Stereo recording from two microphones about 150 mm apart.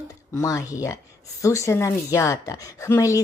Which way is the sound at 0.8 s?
20° left (ahead or behind).